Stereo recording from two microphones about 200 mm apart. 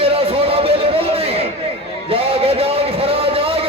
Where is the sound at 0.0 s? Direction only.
30° right (ahead or behind).